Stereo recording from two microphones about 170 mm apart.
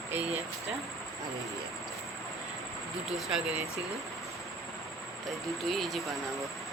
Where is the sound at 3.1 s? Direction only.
Centre (ahead or behind).